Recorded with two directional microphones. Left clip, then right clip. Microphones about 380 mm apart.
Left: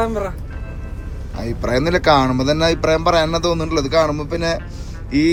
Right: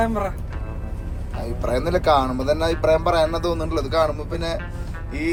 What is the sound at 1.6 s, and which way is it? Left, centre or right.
Speech, left.